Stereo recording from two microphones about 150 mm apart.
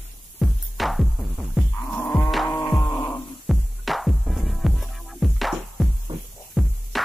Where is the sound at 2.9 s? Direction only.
15° left (ahead or behind).